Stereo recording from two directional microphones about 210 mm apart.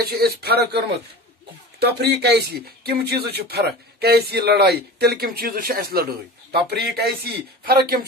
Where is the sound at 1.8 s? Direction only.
50° right (ahead or behind).